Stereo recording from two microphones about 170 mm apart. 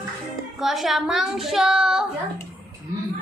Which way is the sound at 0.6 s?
Centre (ahead or behind).